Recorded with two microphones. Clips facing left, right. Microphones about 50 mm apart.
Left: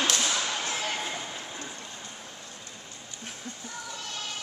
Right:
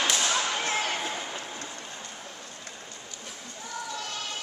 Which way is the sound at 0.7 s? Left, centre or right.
Right.